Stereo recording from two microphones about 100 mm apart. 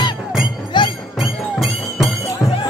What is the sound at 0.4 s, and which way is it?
Music, 50° left (ahead or behind).